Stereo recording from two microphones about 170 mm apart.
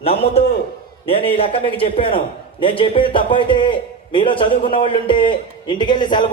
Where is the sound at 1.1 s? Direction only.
35° left (ahead or behind).